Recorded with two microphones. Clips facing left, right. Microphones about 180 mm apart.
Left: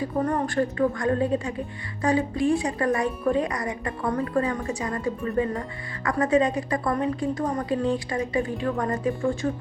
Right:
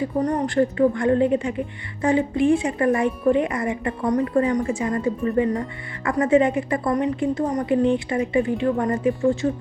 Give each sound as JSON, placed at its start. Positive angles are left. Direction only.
{"t": 0.0, "sound": "speech", "side_deg": -20}